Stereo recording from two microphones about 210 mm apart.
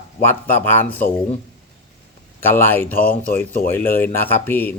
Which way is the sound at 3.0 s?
40° left (ahead or behind).